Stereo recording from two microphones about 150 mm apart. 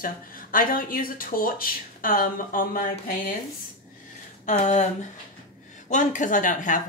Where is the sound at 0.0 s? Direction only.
75° left (ahead or behind).